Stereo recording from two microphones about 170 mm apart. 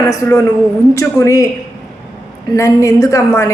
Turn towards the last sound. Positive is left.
turn(degrees=15)  # may be behind; listen again after turning